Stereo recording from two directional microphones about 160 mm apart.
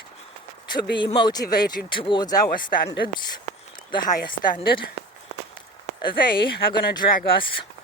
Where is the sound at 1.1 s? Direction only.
25° left (ahead or behind).